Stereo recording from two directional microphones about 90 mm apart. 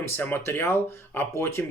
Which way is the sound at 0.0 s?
25° left (ahead or behind).